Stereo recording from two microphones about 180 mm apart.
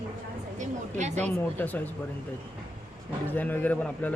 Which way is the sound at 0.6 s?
40° right (ahead or behind).